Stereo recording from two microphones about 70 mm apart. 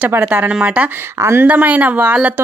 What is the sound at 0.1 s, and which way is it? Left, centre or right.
Speech, right.